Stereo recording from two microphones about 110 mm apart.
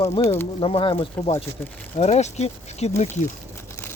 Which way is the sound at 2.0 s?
90° left.